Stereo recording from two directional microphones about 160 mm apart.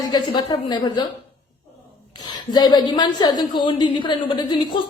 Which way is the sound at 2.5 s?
25° left (ahead or behind).